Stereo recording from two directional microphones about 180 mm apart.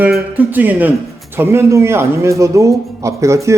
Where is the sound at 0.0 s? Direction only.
10° right (ahead or behind).